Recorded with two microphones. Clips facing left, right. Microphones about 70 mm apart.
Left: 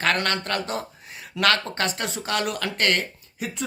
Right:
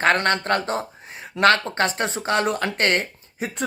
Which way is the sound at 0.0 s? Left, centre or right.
Right.